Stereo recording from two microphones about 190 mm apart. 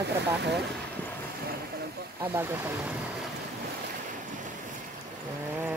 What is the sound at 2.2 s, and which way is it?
Speech, 15° right (ahead or behind).